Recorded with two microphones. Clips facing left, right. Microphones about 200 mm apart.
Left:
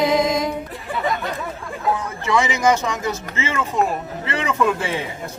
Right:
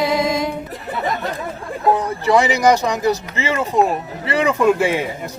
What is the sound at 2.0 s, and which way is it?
Speech, 35° right (ahead or behind).